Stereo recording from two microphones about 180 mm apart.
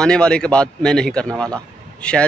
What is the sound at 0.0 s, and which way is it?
A man's voice, 5° left (ahead or behind).